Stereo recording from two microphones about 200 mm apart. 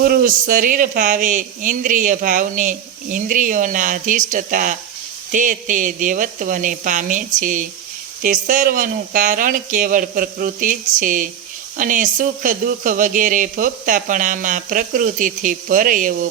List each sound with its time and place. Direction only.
0.0 s speech: 45° right (ahead or behind)